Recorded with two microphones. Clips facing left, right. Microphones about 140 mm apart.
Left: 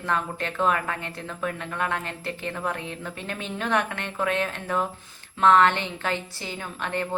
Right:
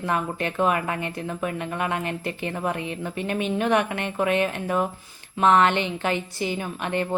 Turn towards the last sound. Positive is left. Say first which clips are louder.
# right 3 dB
turn(degrees=-15)  # may be behind; listen again after turning